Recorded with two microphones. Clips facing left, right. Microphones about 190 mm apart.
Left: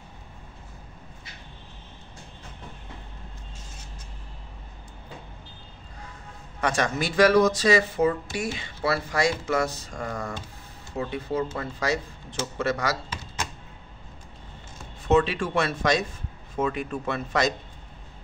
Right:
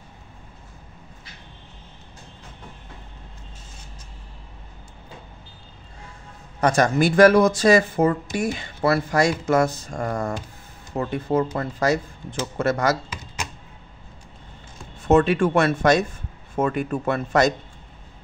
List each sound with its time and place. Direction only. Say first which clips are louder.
6.6 s speech: right 7 dB; 45° right (ahead or behind)
15.0 s speech: right 5 dB; 50° right (ahead or behind)